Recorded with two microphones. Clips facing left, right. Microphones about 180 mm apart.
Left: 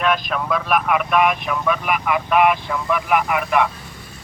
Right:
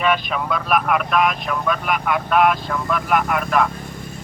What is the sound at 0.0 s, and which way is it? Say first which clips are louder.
Speech: even; centre (ahead or behind).